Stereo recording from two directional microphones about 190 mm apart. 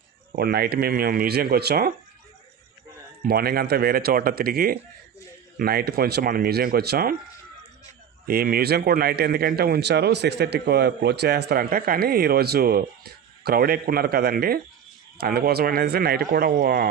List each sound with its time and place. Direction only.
0.3 s speech: 55° right (ahead or behind)
3.2 s speech: 55° right (ahead or behind)
8.3 s speech: 50° right (ahead or behind)